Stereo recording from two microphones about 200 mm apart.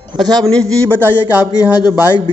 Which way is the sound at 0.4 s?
5° left (ahead or behind).